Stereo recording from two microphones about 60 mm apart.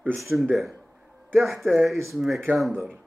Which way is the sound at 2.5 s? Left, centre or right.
Right.